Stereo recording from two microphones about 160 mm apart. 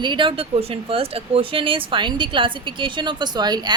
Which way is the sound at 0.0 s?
30° right (ahead or behind).